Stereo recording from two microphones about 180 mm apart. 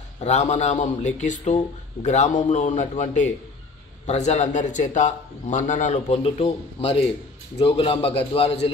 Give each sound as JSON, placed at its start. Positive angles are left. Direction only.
{"t": 0.2, "sound": "speech", "side_deg": 40}